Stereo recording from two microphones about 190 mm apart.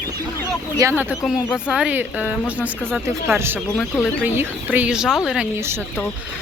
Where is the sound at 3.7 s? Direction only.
5° left (ahead or behind).